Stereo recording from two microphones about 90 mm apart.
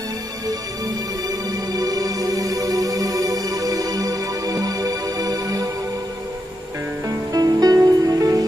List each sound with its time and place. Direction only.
1.7 s music: 45° right (ahead or behind)
7.1 s music: 45° right (ahead or behind)